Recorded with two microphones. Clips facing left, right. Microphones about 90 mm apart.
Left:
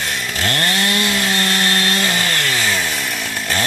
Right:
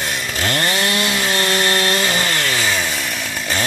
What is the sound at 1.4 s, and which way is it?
Chainsaw, 20° right (ahead or behind).